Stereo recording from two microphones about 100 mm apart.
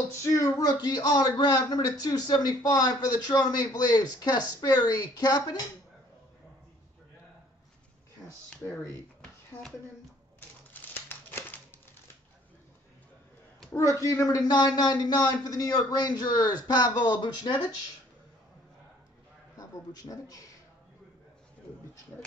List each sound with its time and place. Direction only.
0.2 s a man's voice: 30° left (ahead or behind)
8.2 s a sound: centre (ahead or behind)
10.7 s crumpling: 20° left (ahead or behind)
13.7 s a man's voice: 30° left (ahead or behind)
19.5 s a man's voice: 40° left (ahead or behind)